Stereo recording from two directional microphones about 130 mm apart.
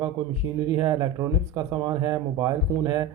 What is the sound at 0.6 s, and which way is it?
Speech, 35° right (ahead or behind).